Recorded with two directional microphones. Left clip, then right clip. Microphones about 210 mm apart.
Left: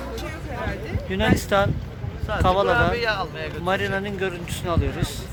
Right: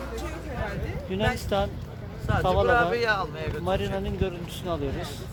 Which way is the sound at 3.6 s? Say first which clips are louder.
Left 5 dB; centre (ahead or behind).